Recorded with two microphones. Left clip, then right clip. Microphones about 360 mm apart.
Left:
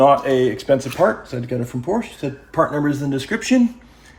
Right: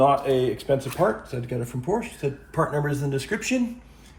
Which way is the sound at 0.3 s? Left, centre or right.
Left.